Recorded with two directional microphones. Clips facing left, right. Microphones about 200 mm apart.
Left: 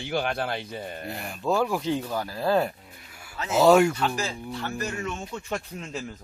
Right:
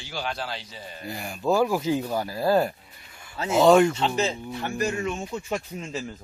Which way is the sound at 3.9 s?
25° right (ahead or behind).